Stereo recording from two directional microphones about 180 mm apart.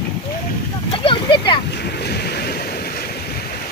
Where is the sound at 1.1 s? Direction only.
25° left (ahead or behind).